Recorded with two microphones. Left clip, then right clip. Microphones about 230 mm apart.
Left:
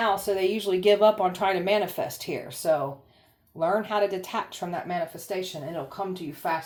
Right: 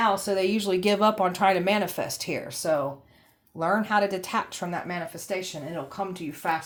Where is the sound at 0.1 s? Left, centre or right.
Right.